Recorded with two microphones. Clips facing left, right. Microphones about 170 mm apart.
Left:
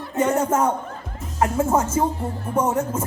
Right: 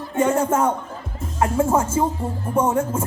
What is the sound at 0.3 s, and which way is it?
A woman's voice, 30° right (ahead or behind).